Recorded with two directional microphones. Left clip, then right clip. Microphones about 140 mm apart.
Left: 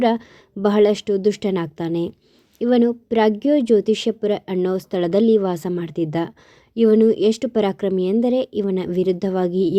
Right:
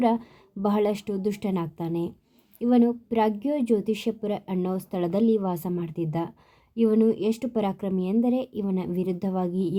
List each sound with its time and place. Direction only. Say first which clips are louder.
0.0 s a woman's voice: left 5 dB; 15° left (ahead or behind)